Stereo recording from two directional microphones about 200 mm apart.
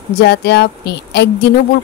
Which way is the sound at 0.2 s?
55° left (ahead or behind).